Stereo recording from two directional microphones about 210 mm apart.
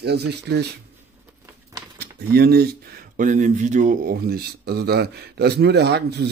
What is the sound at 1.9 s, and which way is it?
Speech, 50° right (ahead or behind).